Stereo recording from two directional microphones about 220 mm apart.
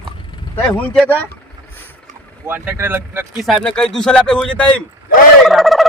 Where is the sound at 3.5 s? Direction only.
5° left (ahead or behind).